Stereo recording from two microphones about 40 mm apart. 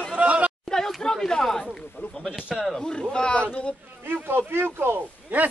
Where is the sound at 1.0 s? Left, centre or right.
Centre.